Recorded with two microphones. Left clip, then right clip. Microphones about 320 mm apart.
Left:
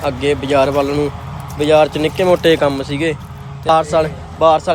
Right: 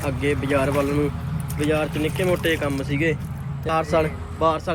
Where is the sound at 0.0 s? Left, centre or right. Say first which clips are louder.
Left 7 dB; centre.